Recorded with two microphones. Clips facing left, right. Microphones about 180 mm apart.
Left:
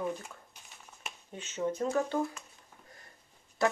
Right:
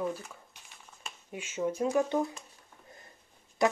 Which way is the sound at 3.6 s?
20° right (ahead or behind).